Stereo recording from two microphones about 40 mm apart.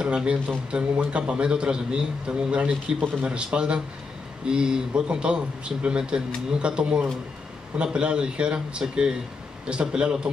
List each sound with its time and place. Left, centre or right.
0.0 s speech: right